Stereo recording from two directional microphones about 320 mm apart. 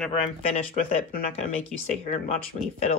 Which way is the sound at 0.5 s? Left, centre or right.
Left.